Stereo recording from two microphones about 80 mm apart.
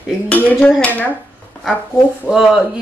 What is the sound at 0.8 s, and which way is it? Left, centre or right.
Cutlery, left.